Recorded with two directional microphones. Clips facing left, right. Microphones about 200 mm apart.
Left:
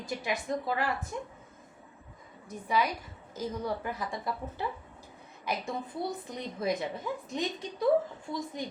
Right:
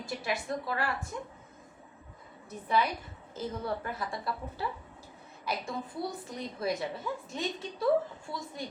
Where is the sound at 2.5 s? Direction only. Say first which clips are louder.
Even; 10° left (ahead or behind).